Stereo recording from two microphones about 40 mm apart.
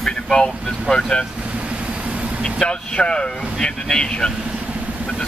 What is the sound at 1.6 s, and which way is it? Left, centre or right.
Vehicle, right.